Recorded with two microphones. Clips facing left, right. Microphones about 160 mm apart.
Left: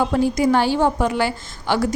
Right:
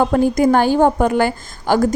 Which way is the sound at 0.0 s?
50° right (ahead or behind).